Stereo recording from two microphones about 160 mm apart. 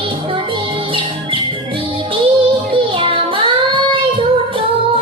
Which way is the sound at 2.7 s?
35° right (ahead or behind).